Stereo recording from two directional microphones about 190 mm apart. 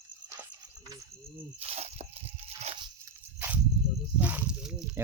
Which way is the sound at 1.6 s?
30° right (ahead or behind).